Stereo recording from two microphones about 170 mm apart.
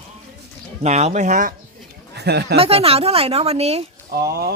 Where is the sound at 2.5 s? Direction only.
35° right (ahead or behind).